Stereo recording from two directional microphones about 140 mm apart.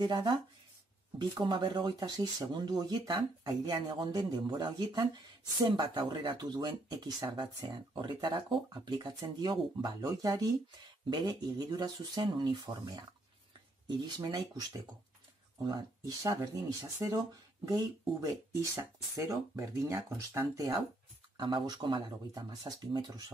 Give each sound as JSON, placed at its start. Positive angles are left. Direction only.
{"t": 0.0, "sound": "speech", "side_deg": -35}
{"t": 18.8, "sound": "speech", "side_deg": -20}